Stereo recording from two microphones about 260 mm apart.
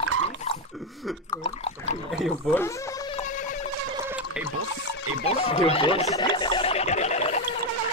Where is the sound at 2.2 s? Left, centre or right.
Centre.